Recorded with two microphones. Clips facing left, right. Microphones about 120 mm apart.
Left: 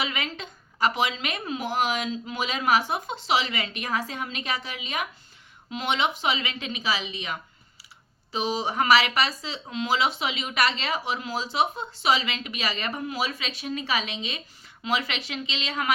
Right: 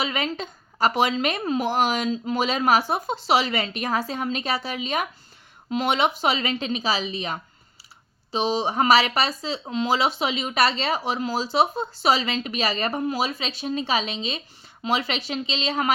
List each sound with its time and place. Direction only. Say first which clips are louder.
0.0 s speech: right 4 dB; 35° right (ahead or behind)